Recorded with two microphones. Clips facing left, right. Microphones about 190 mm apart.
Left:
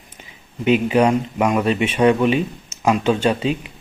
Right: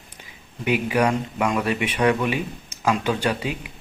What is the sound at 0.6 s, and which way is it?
Speech, 25° left (ahead or behind).